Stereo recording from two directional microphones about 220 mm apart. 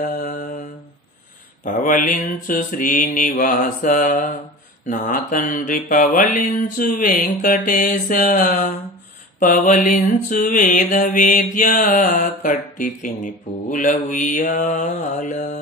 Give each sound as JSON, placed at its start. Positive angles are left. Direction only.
{"t": 0.0, "sound": "mantra", "side_deg": 35}
{"t": 1.6, "sound": "mantra", "side_deg": 35}